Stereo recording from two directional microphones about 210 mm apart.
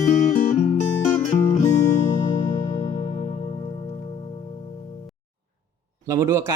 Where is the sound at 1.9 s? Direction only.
40° left (ahead or behind).